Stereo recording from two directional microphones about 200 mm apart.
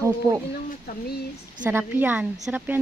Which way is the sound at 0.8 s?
50° left (ahead or behind).